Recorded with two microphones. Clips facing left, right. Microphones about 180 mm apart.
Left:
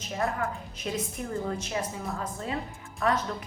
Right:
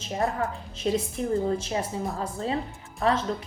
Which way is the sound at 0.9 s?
30° right (ahead or behind).